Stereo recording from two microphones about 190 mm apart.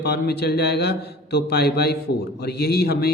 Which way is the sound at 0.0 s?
60° left (ahead or behind).